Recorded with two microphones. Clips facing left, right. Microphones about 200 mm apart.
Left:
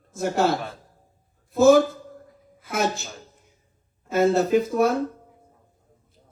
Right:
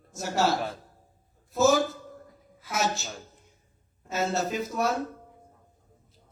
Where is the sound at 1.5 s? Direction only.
55° left (ahead or behind).